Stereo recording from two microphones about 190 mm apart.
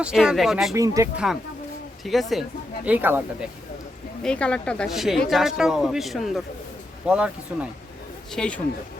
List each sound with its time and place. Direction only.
0.0 s speech: 5° right (ahead or behind)
0.7 s speech: 15° right (ahead or behind)
1.1 s speech: 5° right (ahead or behind)
4.2 s speech: 5° left (ahead or behind)
8.3 s speech: 5° left (ahead or behind)